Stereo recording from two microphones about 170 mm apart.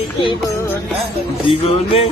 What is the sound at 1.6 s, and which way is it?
Music, 35° left (ahead or behind).